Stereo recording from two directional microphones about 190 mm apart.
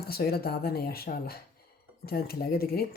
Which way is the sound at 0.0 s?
55° left (ahead or behind).